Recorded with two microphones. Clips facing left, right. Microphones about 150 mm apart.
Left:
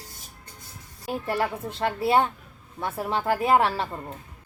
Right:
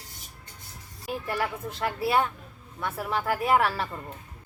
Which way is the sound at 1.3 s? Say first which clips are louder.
Left 4 dB; 30° left (ahead or behind).